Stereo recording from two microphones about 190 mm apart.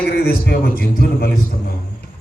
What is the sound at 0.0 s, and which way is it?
A man's voice, 55° left (ahead or behind).